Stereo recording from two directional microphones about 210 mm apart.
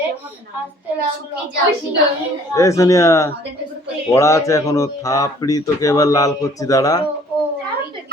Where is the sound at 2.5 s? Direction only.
15° left (ahead or behind).